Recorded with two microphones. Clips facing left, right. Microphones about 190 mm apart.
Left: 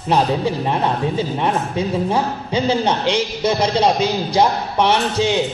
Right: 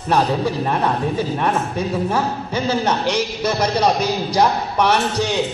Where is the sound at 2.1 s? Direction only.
15° left (ahead or behind).